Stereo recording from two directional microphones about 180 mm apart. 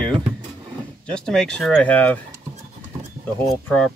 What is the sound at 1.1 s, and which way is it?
Speech, 5° left (ahead or behind).